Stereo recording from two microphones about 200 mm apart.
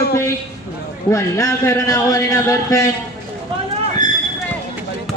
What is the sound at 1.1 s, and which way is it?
A man's voice, 15° left (ahead or behind).